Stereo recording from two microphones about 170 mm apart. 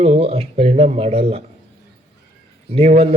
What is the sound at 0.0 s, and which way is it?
A man's voice, 35° right (ahead or behind).